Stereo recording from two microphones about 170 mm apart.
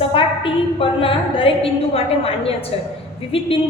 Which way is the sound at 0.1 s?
30° left (ahead or behind).